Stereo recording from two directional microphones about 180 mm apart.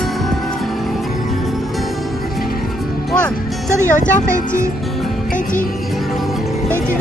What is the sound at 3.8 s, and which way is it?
Speech, 45° left (ahead or behind).